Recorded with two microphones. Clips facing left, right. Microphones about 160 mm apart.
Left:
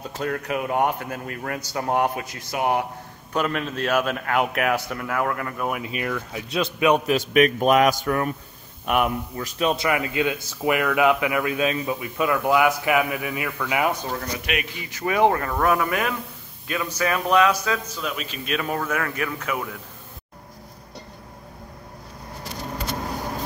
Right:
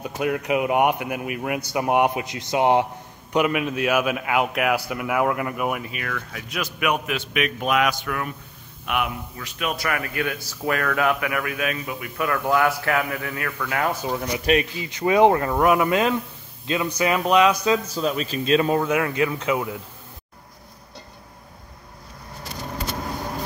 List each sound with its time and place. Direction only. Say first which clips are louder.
0.0 s a man's voice: right 3 dB; 15° right (ahead or behind)
3.3 s a man's voice: right 3 dB; 10° right (ahead or behind)
6.0 s speech: left 4 dB; 15° left (ahead or behind)
6.5 s a man's voice: left 5 dB; 25° left (ahead or behind)
9.7 s speech: left 3 dB; 20° left (ahead or behind)
14.0 s a man's voice: right 3 dB; 15° right (ahead or behind)
14.4 s a man's voice: right 8 dB; 35° right (ahead or behind)
14.8 s speech: right 1 dB; 20° right (ahead or behind)
17.9 s speech: right 6 dB; 35° right (ahead or behind); by 19.8 s 20° right (ahead or behind)